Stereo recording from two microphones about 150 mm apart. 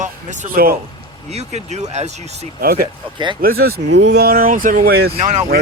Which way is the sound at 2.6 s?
80° right.